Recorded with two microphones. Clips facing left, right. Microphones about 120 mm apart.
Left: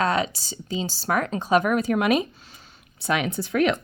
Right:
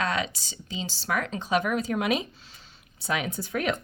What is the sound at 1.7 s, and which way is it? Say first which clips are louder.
Speech: left 5 dB; 65° left (ahead or behind).